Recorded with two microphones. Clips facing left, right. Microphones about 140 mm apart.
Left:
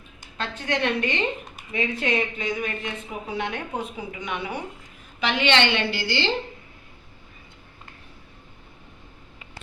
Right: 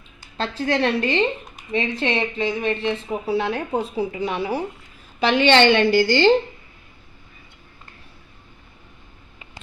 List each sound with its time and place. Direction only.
0.3 s a woman's voice: 30° right (ahead or behind)